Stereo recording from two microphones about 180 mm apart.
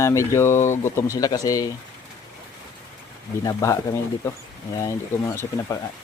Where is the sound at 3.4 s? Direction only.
15° left (ahead or behind).